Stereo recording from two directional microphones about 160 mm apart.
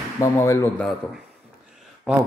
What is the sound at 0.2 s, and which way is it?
Speech, 20° left (ahead or behind).